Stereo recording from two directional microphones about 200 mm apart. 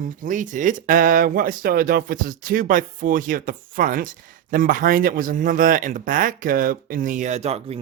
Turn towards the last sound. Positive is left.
turn(degrees=-30)  # may be behind; listen again after turning